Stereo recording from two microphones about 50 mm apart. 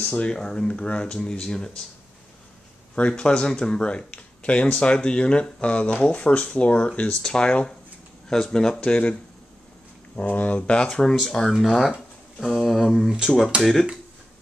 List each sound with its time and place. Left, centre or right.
0.0 s speech: left
0.3 s speech: centre
3.0 s speech: centre
10.1 s speech: left; by 11.6 s centre
11.6 s speech: centre